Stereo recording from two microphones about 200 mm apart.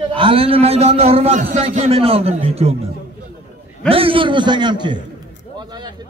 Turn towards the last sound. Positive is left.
turn(degrees=-20)  # may be behind; listen again after turning